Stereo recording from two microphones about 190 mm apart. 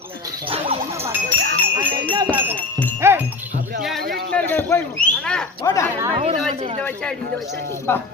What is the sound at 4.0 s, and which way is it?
Speech, 55° right (ahead or behind).